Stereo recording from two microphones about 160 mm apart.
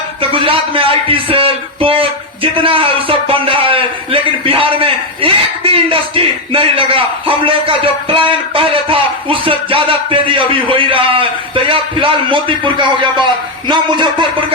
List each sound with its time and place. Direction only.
0.2 s speech: 35° right (ahead or behind)